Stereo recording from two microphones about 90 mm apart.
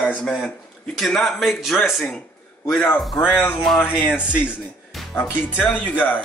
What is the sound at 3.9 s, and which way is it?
Speech, 10° right (ahead or behind).